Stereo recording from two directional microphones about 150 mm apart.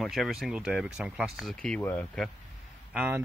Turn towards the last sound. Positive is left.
turn(degrees=-5)  # may be behind; listen again after turning